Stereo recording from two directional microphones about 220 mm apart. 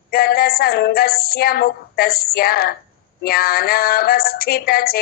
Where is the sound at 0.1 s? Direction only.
45° left (ahead or behind).